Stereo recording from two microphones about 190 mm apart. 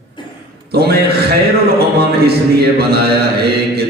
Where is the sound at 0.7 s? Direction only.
55° right (ahead or behind).